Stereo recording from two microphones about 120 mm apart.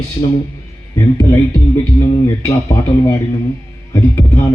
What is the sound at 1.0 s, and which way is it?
Speech, 25° left (ahead or behind).